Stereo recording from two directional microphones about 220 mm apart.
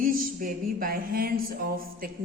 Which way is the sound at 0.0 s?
40° right (ahead or behind).